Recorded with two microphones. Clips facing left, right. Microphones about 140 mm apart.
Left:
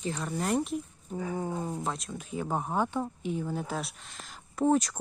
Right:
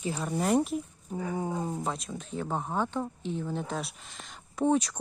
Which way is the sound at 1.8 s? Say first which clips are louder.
Right 1 dB; centre (ahead or behind).